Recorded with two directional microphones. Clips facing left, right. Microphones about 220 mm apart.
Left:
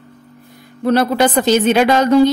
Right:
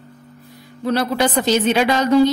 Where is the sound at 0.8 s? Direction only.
55° left (ahead or behind).